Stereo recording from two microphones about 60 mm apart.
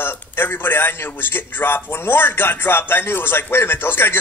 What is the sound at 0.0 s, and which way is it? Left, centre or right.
A man's voice, left.